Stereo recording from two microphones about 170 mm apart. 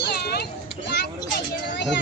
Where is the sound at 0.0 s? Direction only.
70° left (ahead or behind).